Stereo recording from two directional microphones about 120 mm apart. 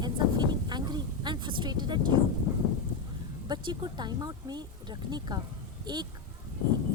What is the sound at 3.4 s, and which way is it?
Speech, 40° right (ahead or behind).